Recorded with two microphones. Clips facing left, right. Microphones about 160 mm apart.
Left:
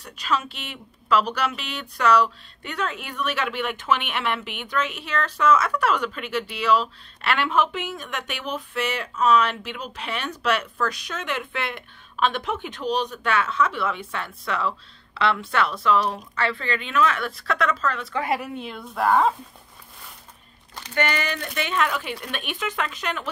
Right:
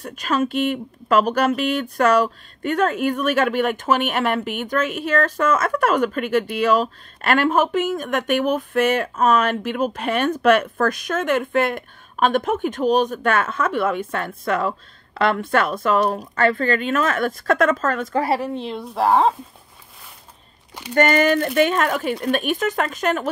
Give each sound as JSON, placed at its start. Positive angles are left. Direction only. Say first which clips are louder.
{"t": 0.0, "sound": "speech", "louder": "right 5 dB", "side_deg": -50}
{"t": 20.9, "sound": "speech", "louder": "right 9 dB", "side_deg": -45}